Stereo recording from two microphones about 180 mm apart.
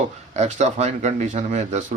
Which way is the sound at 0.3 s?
40° right (ahead or behind).